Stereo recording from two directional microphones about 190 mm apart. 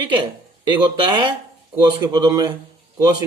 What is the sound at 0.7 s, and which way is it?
A man's voice, 25° right (ahead or behind).